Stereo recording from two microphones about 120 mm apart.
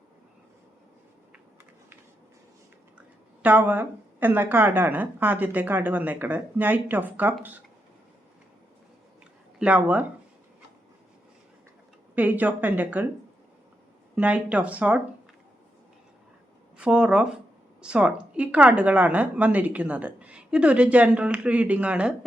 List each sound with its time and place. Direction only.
3.4 s a woman's voice: 15° right (ahead or behind)
9.6 s a woman's voice: 10° right (ahead or behind)
12.1 s a woman's voice: 10° right (ahead or behind)
14.2 s a woman's voice: 10° right (ahead or behind)
16.7 s a woman's voice: 10° right (ahead or behind)